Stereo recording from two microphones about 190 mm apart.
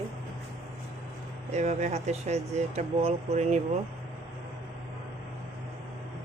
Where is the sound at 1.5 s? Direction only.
35° right (ahead or behind).